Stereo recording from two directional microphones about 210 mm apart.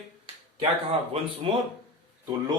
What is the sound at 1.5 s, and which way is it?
Speech, 25° right (ahead or behind).